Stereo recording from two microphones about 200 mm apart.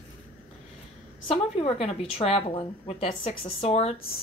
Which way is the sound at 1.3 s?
30° left (ahead or behind).